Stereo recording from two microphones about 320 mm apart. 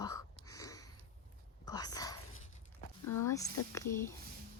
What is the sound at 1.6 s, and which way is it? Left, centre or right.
Speech, centre.